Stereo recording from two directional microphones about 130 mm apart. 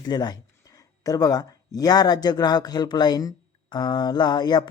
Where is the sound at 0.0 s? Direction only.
35° left (ahead or behind).